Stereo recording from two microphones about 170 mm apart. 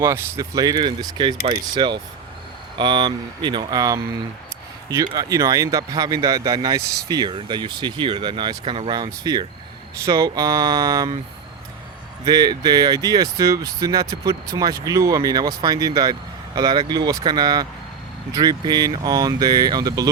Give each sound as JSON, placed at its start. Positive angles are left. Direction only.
{"t": 0.0, "sound": "speech", "side_deg": -20}
{"t": 5.1, "sound": "speech", "side_deg": -20}
{"t": 12.2, "sound": "speech", "side_deg": -20}